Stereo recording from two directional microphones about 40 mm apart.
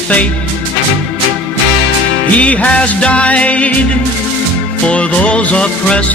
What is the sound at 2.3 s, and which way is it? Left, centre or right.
Music, left.